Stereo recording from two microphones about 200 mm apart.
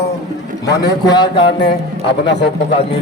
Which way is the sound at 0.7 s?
20° left (ahead or behind).